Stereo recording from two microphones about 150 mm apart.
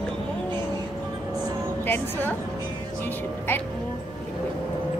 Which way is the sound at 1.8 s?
15° left (ahead or behind).